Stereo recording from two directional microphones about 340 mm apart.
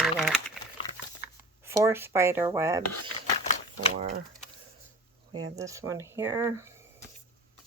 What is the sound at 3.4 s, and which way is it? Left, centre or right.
Typewriter, centre.